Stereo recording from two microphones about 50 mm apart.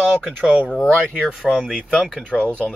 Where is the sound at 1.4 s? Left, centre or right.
Centre.